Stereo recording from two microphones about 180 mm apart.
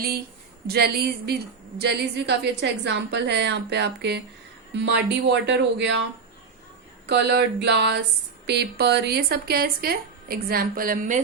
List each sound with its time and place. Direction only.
0.7 s a woman's voice: 65° right (ahead or behind); by 6.1 s 80° right
7.1 s a woman's voice: 70° right (ahead or behind); by 11.2 s 45° right (ahead or behind)